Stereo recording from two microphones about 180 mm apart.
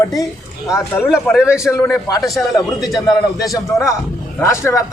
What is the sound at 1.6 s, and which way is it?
A man's voice, 15° left (ahead or behind).